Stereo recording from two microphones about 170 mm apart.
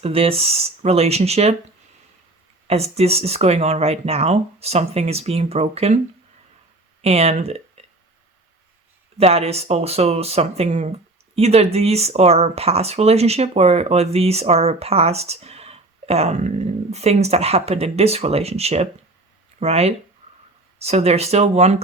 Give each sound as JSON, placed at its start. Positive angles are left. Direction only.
{"t": 0.0, "sound": "speech", "side_deg": -35}
{"t": 2.6, "sound": "speech", "side_deg": -40}
{"t": 7.0, "sound": "speech", "side_deg": -35}
{"t": 9.1, "sound": "speech", "side_deg": -35}
{"t": 20.2, "sound": "a sound", "side_deg": -45}
{"t": 20.7, "sound": "speech", "side_deg": -40}